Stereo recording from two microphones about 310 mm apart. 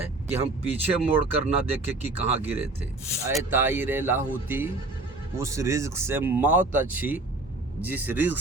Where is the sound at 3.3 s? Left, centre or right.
Centre.